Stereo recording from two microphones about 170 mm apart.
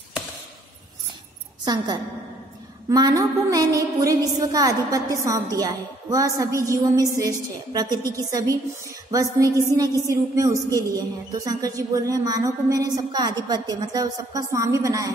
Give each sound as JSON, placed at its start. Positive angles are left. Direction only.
{"t": 1.6, "sound": "a woman's voice", "side_deg": -25}